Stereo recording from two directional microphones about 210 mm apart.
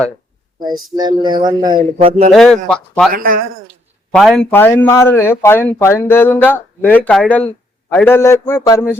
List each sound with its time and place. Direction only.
0.9 s speech: 20° right (ahead or behind)
2.3 s speech: centre (ahead or behind)
3.1 s speech: 45° right (ahead or behind)
4.1 s a man's voice: centre (ahead or behind)